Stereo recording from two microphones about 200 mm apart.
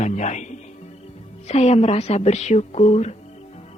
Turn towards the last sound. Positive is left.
turn(degrees=30)  # may be behind; listen again after turning